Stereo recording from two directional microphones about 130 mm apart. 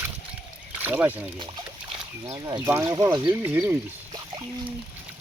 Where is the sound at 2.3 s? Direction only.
30° right (ahead or behind).